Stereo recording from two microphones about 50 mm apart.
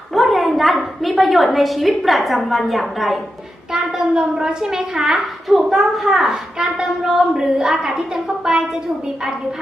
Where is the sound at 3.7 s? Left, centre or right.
Centre.